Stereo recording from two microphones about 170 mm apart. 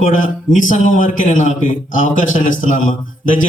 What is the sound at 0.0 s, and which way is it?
A man's voice, 50° left (ahead or behind).